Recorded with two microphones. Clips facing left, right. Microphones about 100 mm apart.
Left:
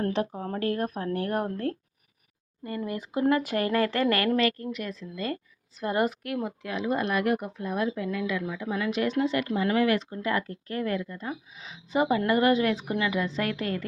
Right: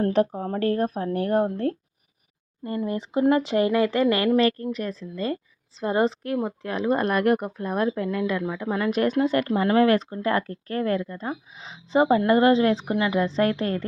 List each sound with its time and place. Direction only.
0.3 s speech: 35° right (ahead or behind); by 4.4 s 20° right (ahead or behind)
4.4 s speech: 35° right (ahead or behind)